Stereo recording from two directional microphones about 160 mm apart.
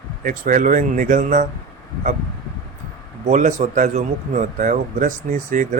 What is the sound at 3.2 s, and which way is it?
Speech, 50° right (ahead or behind).